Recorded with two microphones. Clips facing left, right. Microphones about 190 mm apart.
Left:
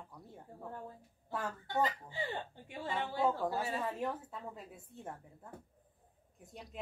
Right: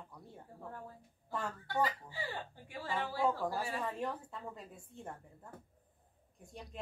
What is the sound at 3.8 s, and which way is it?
A woman's voice, 5° left (ahead or behind).